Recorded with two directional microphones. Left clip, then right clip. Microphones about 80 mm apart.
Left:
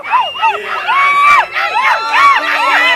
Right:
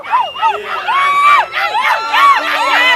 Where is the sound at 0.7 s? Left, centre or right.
Centre; by 2.6 s right.